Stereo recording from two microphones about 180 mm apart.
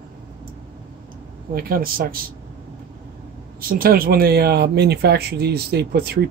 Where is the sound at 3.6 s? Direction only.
55° right (ahead or behind).